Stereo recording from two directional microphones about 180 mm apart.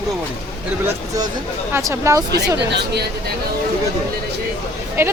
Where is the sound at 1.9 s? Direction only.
15° right (ahead or behind).